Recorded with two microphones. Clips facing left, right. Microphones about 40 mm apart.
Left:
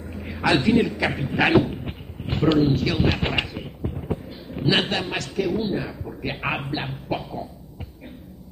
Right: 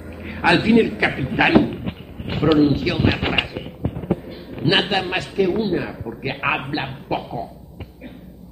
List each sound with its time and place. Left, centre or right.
0.3 s a man's voice: right
1.7 s a sound: centre
4.6 s a man's voice: centre